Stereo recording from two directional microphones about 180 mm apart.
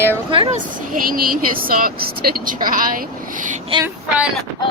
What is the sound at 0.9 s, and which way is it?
Speech, 50° right (ahead or behind).